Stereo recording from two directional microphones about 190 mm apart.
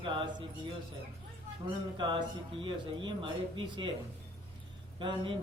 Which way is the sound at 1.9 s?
25° right (ahead or behind).